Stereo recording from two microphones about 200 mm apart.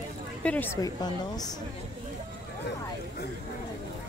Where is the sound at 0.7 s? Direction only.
20° left (ahead or behind).